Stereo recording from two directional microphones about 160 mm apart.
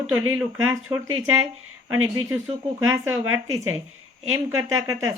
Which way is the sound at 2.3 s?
15° right (ahead or behind).